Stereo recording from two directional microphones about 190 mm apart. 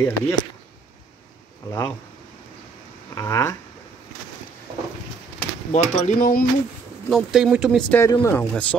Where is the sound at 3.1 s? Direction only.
15° left (ahead or behind).